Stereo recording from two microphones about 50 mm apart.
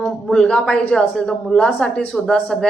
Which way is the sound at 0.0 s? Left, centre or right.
Centre.